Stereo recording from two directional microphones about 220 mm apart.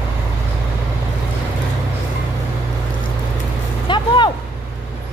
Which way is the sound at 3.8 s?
20° left (ahead or behind).